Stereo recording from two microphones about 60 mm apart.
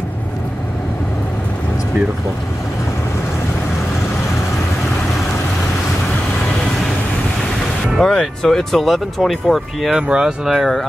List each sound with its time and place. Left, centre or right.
8.0 s speech: centre
9.9 s speech: centre